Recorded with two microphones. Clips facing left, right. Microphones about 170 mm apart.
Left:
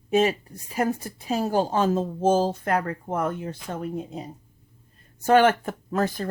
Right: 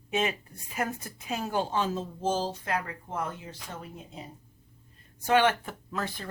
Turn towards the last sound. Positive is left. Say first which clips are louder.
# left 9 dB
turn(degrees=45)  # may be behind; listen again after turning